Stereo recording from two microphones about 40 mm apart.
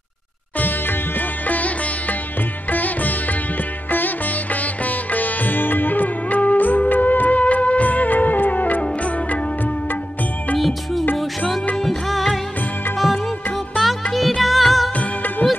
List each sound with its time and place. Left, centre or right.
1.5 s music: left
4.8 s music: left
11.8 s music: centre
13.7 s music: centre
15.4 s music: centre